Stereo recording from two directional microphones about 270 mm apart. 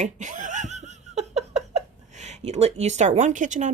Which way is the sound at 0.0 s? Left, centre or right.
Right.